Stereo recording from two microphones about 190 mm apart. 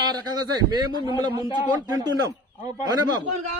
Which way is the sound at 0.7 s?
20° right (ahead or behind).